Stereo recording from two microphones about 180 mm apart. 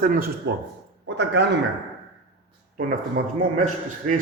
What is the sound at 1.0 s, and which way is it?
Speech, 75° right (ahead or behind).